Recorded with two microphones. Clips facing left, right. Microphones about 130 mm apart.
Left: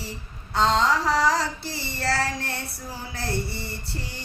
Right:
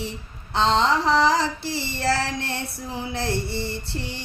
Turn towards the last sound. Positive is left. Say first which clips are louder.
# right 4 dB
turn(degrees=-25)  # may be behind; listen again after turning